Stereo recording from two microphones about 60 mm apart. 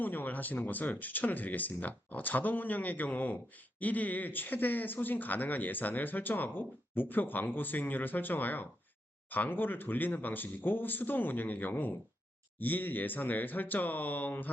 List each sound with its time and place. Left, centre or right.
0.0 s speech: left